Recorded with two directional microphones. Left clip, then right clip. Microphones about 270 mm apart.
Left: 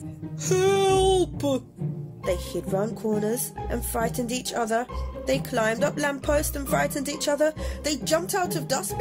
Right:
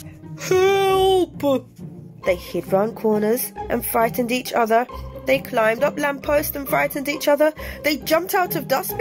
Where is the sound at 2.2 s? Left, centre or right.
Centre.